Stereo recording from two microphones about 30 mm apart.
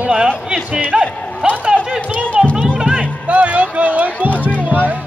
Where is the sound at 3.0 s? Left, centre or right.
Right.